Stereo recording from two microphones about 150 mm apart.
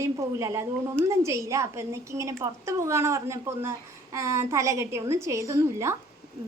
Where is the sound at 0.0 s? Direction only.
20° right (ahead or behind).